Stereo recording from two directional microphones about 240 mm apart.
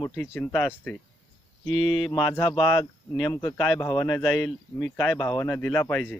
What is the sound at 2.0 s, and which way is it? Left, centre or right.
Speech, centre.